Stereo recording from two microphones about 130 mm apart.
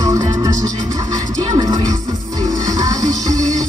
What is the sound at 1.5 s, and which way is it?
Music, 30° right (ahead or behind).